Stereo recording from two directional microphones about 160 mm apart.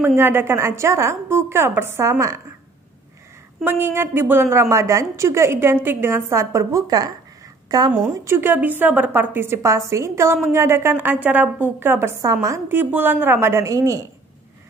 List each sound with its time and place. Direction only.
0.0 s a woman's voice: 15° right (ahead or behind)
3.6 s a woman's voice: 15° right (ahead or behind)